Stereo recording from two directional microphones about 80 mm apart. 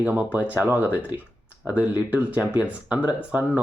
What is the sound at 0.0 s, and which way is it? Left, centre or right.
Speech, right.